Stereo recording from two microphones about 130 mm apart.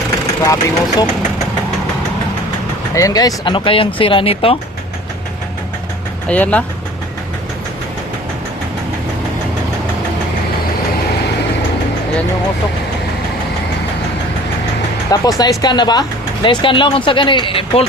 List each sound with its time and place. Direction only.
0.4 s speech: 25° left (ahead or behind)
2.9 s speech: 25° left (ahead or behind); by 4.5 s 45° left (ahead or behind)
6.2 s speech: 10° left (ahead or behind)
15.1 s speech: 30° left (ahead or behind)